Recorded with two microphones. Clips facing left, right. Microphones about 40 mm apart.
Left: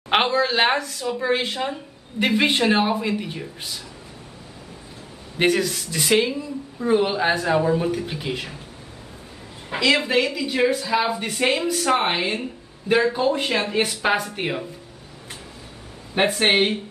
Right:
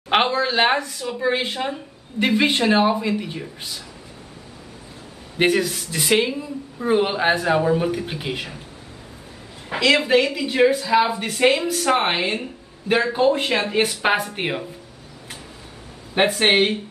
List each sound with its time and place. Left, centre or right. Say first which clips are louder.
0.1 s speech: even; centre
5.4 s speech: right 1 dB; centre
9.8 s speech: right 2 dB; centre
14.4 s speech: right 1 dB; right
16.3 s speech: right 1 dB; centre